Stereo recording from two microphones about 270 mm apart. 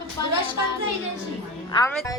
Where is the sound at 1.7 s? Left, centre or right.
Centre.